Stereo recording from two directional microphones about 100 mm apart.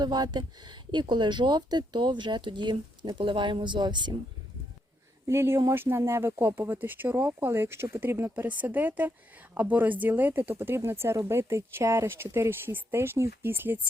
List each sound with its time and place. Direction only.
0.0 s speech: 45° right (ahead or behind)
5.3 s speech: 25° right (ahead or behind)